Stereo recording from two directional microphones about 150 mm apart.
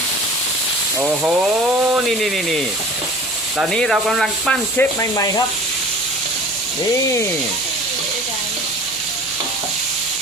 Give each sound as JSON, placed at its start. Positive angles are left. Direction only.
{"t": 0.9, "sound": "speech", "side_deg": -15}
{"t": 3.6, "sound": "speech", "side_deg": 5}
{"t": 4.9, "sound": "speech", "side_deg": 25}